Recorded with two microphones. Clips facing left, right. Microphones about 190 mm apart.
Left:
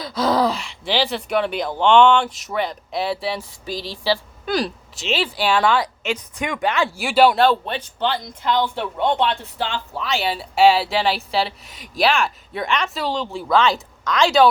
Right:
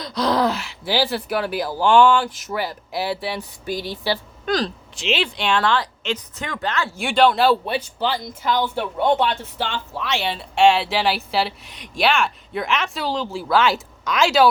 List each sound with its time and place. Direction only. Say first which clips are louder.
0.0 s a woman's voice: left 1 dB; centre (ahead or behind)
3.7 s speech: right 2 dB; 55° right (ahead or behind)
4.4 s speech: even; 10° left (ahead or behind)
4.9 s a woman's voice: even; centre (ahead or behind)
7.4 s a woman's voice: even; 10° right (ahead or behind)